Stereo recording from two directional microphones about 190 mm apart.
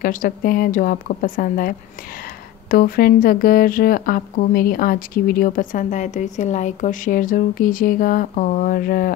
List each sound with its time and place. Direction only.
0.0 s speech: 45° left (ahead or behind)